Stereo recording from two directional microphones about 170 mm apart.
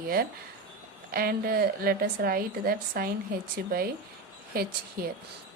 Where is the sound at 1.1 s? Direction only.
60° right (ahead or behind).